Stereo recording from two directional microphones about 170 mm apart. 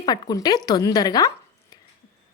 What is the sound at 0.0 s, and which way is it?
A woman's voice, 25° left (ahead or behind).